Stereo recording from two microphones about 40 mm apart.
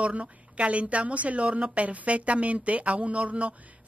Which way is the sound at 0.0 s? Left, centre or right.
Right.